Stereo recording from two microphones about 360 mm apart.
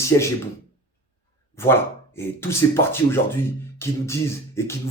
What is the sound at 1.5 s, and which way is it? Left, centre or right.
Speech, centre.